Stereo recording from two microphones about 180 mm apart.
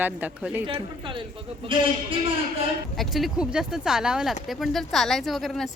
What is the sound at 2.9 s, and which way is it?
Speech, centre (ahead or behind).